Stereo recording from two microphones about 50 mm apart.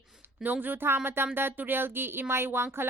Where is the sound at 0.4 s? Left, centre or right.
Right.